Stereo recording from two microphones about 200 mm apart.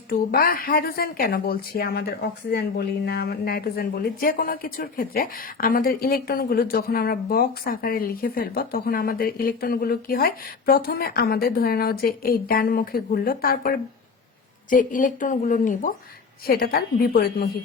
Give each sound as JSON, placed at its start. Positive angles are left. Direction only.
{"t": 0.1, "sound": "speech", "side_deg": 45}